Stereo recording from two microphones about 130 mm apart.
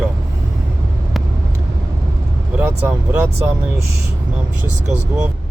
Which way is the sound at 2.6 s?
15° right (ahead or behind).